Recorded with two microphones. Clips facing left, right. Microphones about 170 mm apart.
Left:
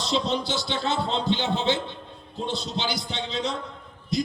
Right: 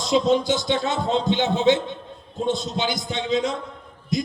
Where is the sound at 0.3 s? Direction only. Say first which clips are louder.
Right 7 dB; 50° right (ahead or behind).